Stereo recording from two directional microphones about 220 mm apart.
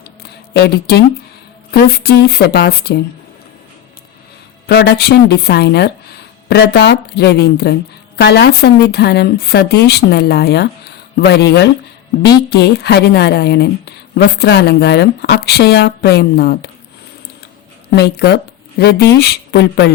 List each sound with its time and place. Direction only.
0.2 s a sound: 45° left (ahead or behind)
1.7 s a woman's voice: 45° left (ahead or behind)
4.6 s a woman's voice: 50° left (ahead or behind)
17.9 s a woman's voice: 50° left (ahead or behind)